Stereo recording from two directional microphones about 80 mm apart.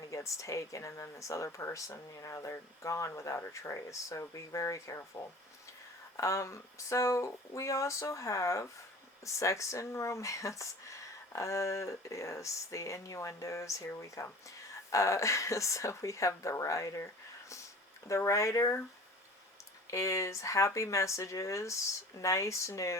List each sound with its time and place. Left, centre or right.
0.0 s a woman's voice: left
18.1 s speech: left
19.9 s speech: left